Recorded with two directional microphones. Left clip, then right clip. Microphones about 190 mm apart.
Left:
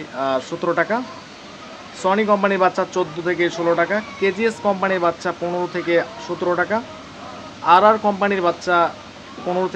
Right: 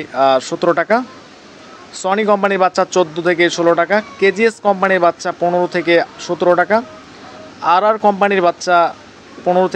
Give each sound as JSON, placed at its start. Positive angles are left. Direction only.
{"t": 0.1, "sound": "speech", "side_deg": -40}